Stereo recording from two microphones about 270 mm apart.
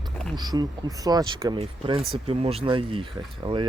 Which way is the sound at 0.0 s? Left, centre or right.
Centre.